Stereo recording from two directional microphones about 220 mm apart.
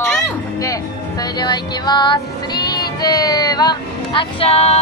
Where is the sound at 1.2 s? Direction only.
20° left (ahead or behind).